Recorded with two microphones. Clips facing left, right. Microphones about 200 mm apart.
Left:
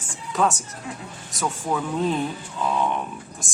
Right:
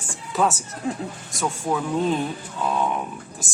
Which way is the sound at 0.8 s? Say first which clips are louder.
Right 9 dB; 35° right (ahead or behind).